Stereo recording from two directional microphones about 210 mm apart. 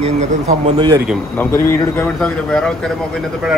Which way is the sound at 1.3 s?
10° left (ahead or behind).